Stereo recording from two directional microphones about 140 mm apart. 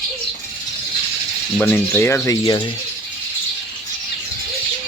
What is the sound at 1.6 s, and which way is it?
Speech, 10° left (ahead or behind).